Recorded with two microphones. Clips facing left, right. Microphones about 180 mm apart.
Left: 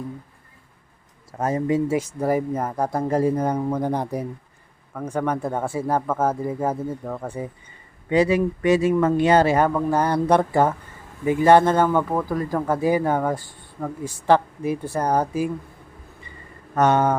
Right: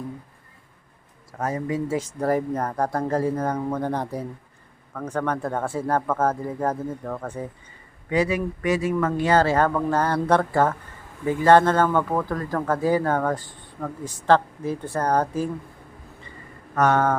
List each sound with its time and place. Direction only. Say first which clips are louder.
1.4 s speech: left 4 dB; 25° left (ahead or behind)
2.0 s speech: left 1 dB; 10° left (ahead or behind)
8.1 s speech: left 4 dB; 25° left (ahead or behind); by 15.4 s 10° left (ahead or behind)
16.7 s speech: left 2 dB; 20° left (ahead or behind)